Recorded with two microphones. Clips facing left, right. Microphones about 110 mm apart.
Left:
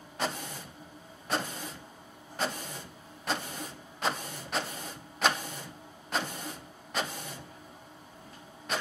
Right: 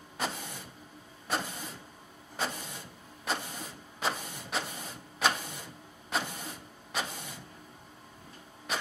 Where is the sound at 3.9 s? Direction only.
5° right (ahead or behind).